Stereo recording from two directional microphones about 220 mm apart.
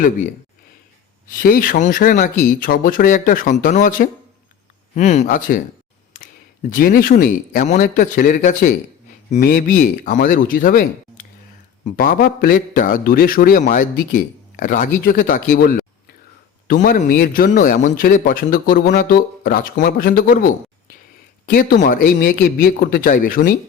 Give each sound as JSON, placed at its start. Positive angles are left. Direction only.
{"t": 1.3, "sound": "a man's voice", "side_deg": 40}
{"t": 6.7, "sound": "a man's voice", "side_deg": 40}